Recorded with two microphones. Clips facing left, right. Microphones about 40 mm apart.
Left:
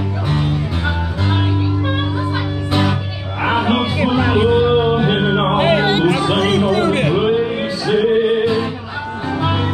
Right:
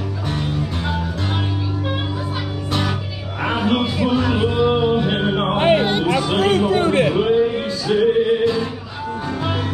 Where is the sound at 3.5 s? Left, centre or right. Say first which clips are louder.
Left 3 dB; left.